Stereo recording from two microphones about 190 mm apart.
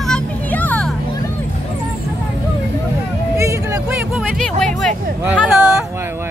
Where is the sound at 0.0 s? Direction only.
5° left (ahead or behind).